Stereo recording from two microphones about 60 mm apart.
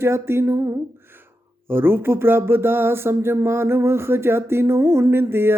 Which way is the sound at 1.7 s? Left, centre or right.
Right.